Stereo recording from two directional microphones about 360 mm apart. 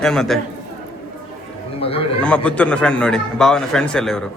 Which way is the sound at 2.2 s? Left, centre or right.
Centre.